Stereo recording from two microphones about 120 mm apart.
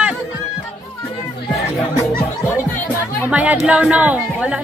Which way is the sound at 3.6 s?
10° right (ahead or behind).